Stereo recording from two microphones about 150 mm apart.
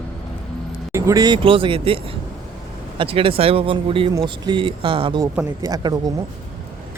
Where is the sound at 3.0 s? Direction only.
35° right (ahead or behind).